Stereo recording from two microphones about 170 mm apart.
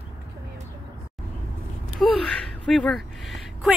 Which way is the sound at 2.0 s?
5° left (ahead or behind).